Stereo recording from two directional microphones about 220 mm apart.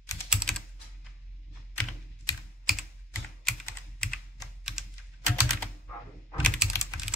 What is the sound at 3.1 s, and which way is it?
Computer keyboard, centre (ahead or behind).